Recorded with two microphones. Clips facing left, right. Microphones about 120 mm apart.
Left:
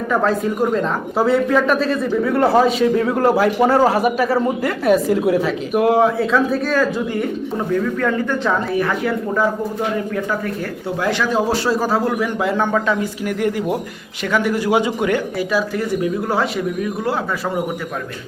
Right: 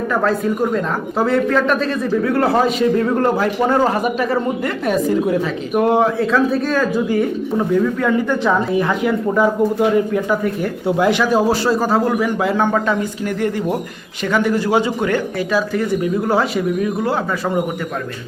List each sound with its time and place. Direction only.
0.1 s speech: centre (ahead or behind)
8.0 s speech: 10° right (ahead or behind)